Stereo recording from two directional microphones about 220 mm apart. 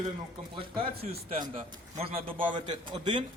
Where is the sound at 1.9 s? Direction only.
30° right (ahead or behind).